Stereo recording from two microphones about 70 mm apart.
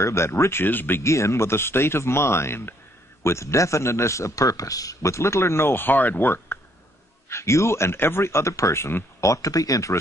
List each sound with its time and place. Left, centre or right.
0.0 s a man's voice: left
1.0 s a man's voice: left